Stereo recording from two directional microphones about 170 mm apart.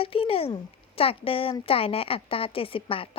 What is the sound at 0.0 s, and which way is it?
Speech, 35° left (ahead or behind).